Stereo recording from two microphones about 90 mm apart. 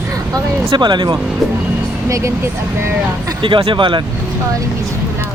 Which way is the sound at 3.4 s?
70° right (ahead or behind).